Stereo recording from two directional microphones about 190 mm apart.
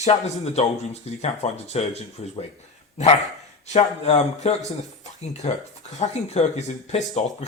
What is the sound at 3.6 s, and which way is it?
Speech, 35° left (ahead or behind).